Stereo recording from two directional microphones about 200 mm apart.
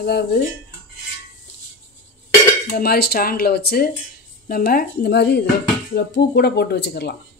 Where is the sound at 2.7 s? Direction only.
50° left (ahead or behind).